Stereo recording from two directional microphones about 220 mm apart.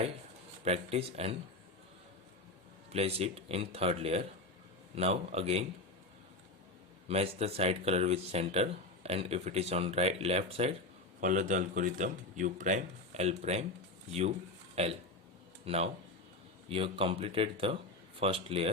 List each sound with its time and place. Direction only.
0.6 s speech: 30° right (ahead or behind)
2.9 s speech: 25° right (ahead or behind)
7.1 s speech: 30° right (ahead or behind)